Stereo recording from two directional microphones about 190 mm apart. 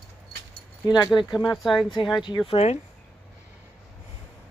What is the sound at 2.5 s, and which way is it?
Speech, 30° left (ahead or behind).